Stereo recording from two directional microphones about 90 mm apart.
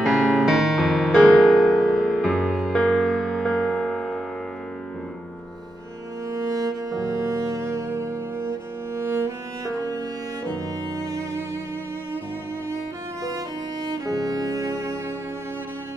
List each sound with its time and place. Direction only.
0.0 s music: centre (ahead or behind)
6.4 s music: 40° right (ahead or behind)
11.1 s music: 35° right (ahead or behind)
13.8 s music: 40° right (ahead or behind)